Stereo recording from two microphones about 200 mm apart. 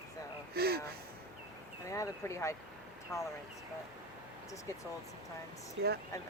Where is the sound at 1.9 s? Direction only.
15° left (ahead or behind).